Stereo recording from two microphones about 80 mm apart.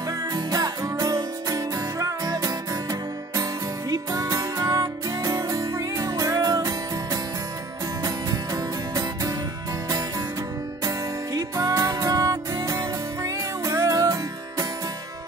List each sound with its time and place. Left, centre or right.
0.3 s music: right